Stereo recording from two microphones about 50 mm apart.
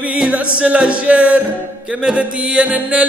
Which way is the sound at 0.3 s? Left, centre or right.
Right.